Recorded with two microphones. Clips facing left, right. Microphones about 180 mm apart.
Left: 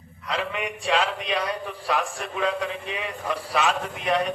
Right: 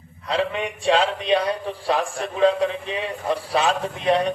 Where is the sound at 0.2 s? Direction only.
30° right (ahead or behind).